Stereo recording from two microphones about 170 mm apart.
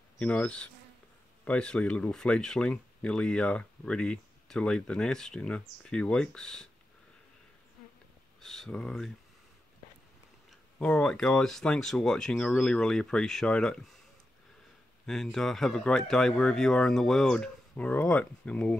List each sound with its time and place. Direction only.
0.2 s insect: 5° left (ahead or behind)
1.4 s speech: 5° left (ahead or behind)
8.4 s speech: centre (ahead or behind)
10.8 s speech: 5° left (ahead or behind)
15.0 s speech: centre (ahead or behind)